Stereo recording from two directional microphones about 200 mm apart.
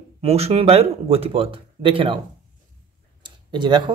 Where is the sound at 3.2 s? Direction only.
25° right (ahead or behind).